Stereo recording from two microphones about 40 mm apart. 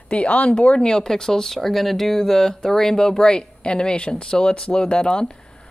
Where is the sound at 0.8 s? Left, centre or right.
Centre.